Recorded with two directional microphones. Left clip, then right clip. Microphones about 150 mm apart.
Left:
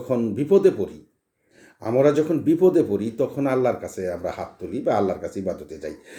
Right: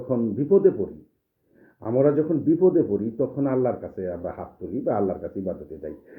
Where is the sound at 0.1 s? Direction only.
25° left (ahead or behind).